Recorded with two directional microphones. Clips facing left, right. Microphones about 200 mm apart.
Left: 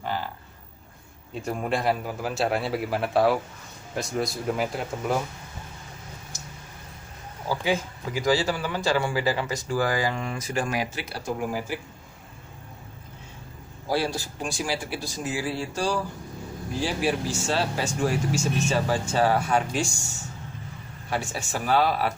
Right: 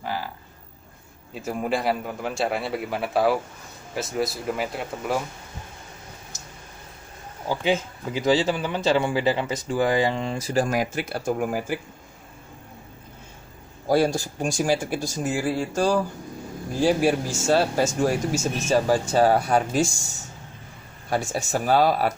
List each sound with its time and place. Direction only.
0.0 s a sound: 5° right (ahead or behind)
1.3 s a man's voice: 5° right (ahead or behind)
7.4 s speech: 20° right (ahead or behind); by 11.8 s 55° right (ahead or behind)
13.8 s speech: 45° right (ahead or behind)
21.1 s speech: 40° right (ahead or behind)